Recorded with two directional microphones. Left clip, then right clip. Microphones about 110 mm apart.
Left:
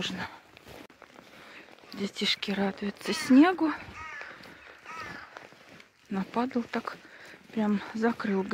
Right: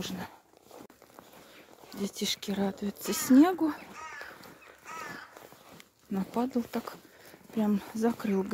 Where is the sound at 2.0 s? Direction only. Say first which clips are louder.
Left 4 dB; 10° right (ahead or behind).